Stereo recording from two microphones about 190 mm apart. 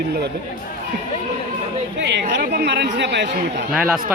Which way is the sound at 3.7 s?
5° right (ahead or behind).